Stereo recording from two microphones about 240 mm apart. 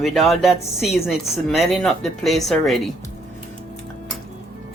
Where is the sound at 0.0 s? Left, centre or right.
Centre.